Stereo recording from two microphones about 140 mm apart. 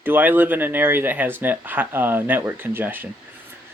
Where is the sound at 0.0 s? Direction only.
15° right (ahead or behind).